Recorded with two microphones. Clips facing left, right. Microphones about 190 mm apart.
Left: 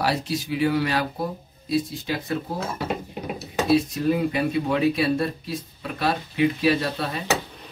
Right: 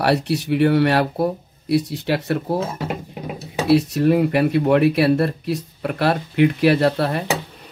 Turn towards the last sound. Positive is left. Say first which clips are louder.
# right 7 dB
turn(degrees=-65)  # may be behind; listen again after turning